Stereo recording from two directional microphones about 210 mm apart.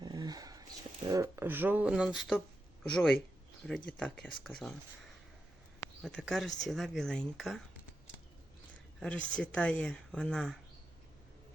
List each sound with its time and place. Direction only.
0.0 s a sound: 20° right (ahead or behind)
1.1 s speech: 15° right (ahead or behind)
9.0 s speech: 5° left (ahead or behind)